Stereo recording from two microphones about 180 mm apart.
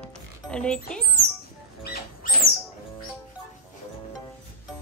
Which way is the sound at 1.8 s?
60° left (ahead or behind).